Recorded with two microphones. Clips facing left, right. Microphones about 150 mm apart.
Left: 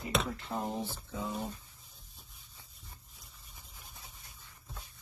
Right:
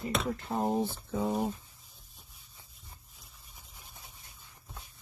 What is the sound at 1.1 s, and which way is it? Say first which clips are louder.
Speech: right 7 dB; 55° right (ahead or behind).